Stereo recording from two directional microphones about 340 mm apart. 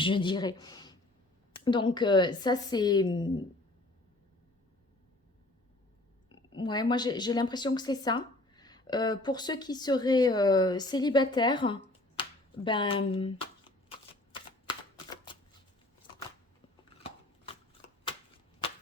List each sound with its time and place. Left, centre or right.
0.0 s a woman's voice: centre
6.2 s speech: centre
17.0 s a sound: centre